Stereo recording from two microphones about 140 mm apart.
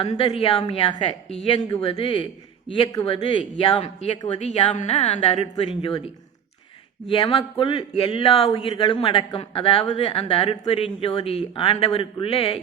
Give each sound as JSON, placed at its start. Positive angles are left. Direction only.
{"t": 0.0, "sound": "a man's voice", "side_deg": 40}
{"t": 7.1, "sound": "a man's voice", "side_deg": 40}